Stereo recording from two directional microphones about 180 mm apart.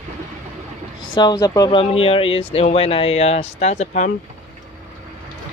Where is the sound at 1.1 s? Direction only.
20° left (ahead or behind); by 4.1 s 40° left (ahead or behind).